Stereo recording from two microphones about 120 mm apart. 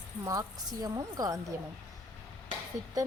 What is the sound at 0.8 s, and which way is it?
Speech, 30° right (ahead or behind).